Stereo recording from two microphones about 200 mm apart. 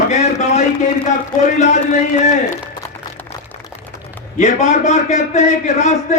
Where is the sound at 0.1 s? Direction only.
35° left (ahead or behind).